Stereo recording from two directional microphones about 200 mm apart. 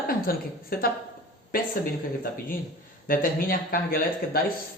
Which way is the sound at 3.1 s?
45° left (ahead or behind).